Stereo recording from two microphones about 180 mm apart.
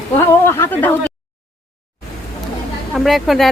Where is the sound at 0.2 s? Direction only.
15° left (ahead or behind).